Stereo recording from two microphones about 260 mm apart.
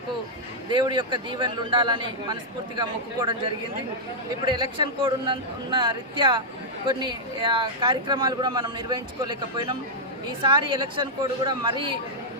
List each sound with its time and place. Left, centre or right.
0.7 s speech: centre
4.4 s a woman's voice: centre